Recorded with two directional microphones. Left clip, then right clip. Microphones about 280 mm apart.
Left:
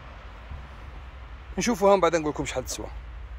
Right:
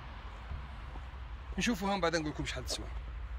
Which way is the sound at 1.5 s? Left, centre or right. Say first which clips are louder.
Left 14 dB; centre.